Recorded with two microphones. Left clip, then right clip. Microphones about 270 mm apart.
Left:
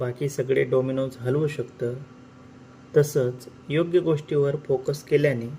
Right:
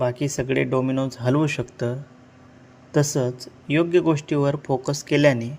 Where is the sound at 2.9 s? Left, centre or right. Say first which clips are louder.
Left 1 dB; right.